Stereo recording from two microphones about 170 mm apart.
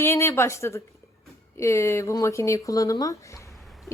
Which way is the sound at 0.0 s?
15° left (ahead or behind).